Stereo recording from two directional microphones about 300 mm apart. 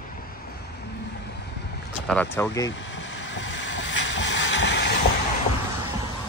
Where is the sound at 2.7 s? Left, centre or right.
Left.